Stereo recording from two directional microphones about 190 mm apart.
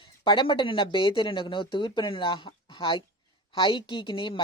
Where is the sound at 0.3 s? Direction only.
25° left (ahead or behind).